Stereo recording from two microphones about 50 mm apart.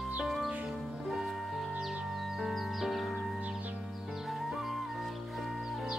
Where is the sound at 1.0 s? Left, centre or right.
Centre.